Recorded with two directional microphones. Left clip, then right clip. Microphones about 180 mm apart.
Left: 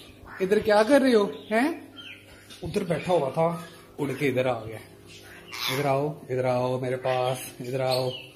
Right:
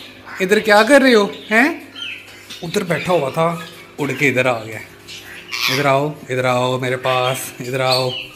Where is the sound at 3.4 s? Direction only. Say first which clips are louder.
Right 7 dB; 5° right (ahead or behind).